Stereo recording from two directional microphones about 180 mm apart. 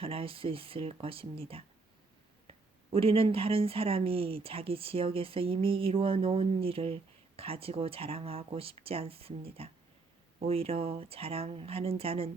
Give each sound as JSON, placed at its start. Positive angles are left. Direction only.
{"t": 0.0, "sound": "speech", "side_deg": -30}